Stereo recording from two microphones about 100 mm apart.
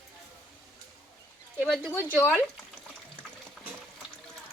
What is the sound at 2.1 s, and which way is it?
Speech, 15° left (ahead or behind).